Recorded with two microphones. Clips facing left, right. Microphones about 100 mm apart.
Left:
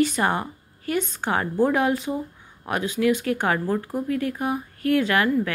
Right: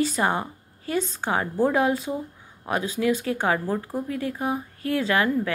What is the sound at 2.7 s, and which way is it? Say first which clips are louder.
A woman's voice: left 2 dB; 25° right (ahead or behind).